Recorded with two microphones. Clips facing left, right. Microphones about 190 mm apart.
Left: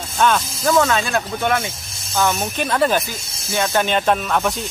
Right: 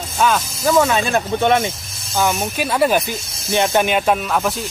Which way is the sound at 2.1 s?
10° right (ahead or behind).